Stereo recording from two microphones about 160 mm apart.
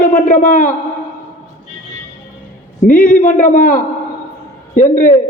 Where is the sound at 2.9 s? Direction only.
55° left (ahead or behind).